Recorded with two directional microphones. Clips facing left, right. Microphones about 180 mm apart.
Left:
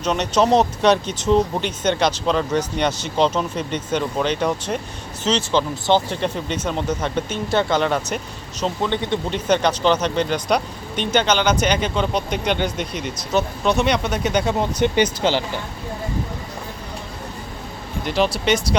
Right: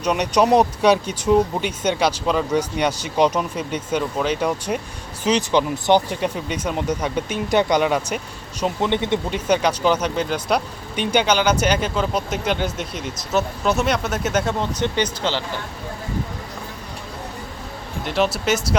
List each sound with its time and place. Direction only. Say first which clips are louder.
0.0 s speech: even; 10° right (ahead or behind)
9.3 s speech: left 3 dB; 10° right (ahead or behind)
14.6 s speech: left 4 dB; 10° left (ahead or behind)
18.0 s speech: left 1 dB; centre (ahead or behind)